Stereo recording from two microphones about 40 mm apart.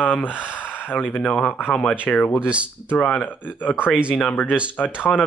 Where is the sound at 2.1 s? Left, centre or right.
Centre.